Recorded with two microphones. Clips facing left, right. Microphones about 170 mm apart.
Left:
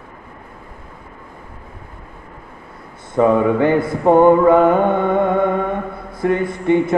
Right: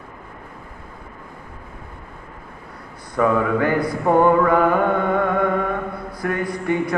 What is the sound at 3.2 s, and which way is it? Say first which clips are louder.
Mantra: left 5 dB; 25° left (ahead or behind).